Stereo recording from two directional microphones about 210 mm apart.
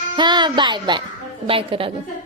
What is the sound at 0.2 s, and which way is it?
A child's voice, 20° right (ahead or behind).